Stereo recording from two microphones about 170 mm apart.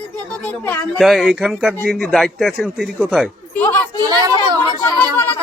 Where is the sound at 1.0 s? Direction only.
Centre (ahead or behind).